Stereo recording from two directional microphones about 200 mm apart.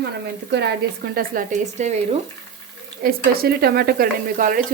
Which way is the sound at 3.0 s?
50° right (ahead or behind).